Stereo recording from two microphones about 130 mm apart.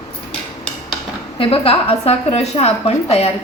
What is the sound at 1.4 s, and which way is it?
A woman's voice, 50° left (ahead or behind).